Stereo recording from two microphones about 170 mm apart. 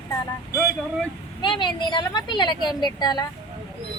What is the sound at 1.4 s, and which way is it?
Speech, 25° left (ahead or behind).